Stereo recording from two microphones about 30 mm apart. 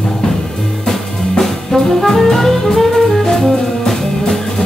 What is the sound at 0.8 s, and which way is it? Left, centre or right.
Music, centre.